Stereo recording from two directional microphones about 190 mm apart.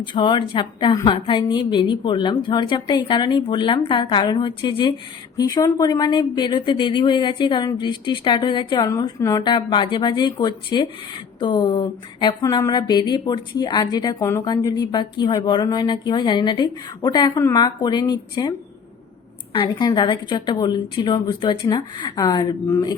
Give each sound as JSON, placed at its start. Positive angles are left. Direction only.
{"t": 0.0, "sound": "speech", "side_deg": 25}
{"t": 19.5, "sound": "speech", "side_deg": 25}